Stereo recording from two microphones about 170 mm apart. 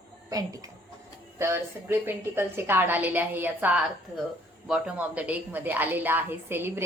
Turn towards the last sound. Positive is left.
turn(degrees=-15)  # may be behind; listen again after turning